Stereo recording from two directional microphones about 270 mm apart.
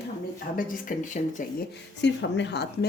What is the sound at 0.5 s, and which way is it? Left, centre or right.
Speech, left.